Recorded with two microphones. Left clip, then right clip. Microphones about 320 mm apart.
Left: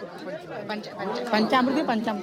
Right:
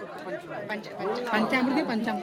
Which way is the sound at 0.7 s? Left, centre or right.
Left.